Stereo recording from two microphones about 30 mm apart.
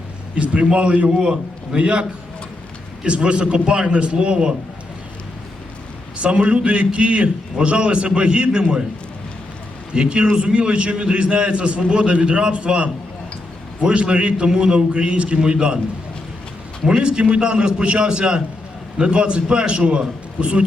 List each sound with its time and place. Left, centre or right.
0.3 s a man's voice: right
0.7 s a man's voice: right
1.2 s a man's voice: right
3.1 s a man's voice: right
6.1 s a man's voice: right
9.9 s a man's voice: right
11.1 s a man's voice: right
13.9 s a man's voice: right
14.4 s a man's voice: right
15.0 s a man's voice: right
15.5 s a man's voice: right
17.0 s a man's voice: right